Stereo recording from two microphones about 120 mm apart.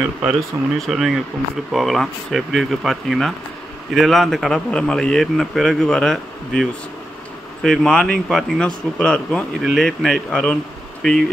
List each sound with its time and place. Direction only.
0.5 s speech: 20° right (ahead or behind)
0.8 s speech: centre (ahead or behind)